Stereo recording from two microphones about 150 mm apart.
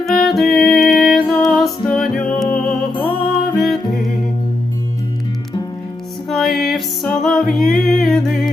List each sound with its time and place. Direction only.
0.0 s music: centre (ahead or behind)
6.2 s music: centre (ahead or behind)